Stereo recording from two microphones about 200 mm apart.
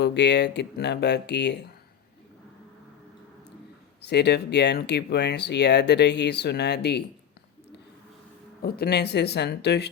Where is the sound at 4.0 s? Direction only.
55° left (ahead or behind).